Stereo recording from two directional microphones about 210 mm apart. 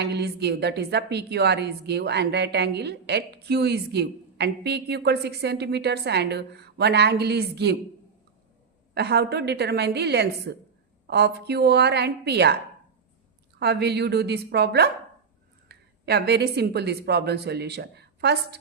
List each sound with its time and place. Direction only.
0.0 s a woman's voice: 50° right (ahead or behind)
9.0 s a woman's voice: 50° right (ahead or behind)
13.6 s a woman's voice: 50° right (ahead or behind)